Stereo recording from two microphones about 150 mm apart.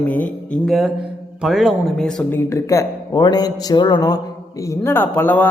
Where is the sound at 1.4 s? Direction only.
Centre (ahead or behind).